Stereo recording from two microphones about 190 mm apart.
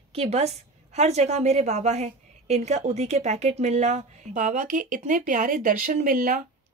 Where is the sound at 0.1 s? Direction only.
35° right (ahead or behind).